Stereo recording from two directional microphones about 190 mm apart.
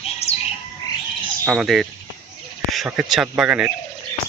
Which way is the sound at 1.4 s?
Centre (ahead or behind).